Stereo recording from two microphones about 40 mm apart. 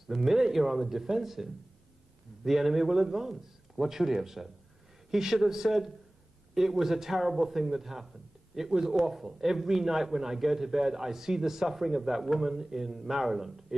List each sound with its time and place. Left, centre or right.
0.0 s a man's voice: centre